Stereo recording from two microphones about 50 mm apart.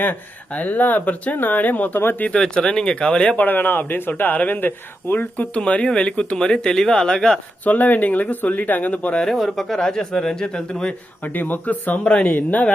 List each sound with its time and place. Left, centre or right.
0.5 s speech: left
2.3 s speech: centre
3.3 s speech: left
5.2 s speech: left
7.6 s speech: left
9.2 s speech: centre
11.2 s speech: left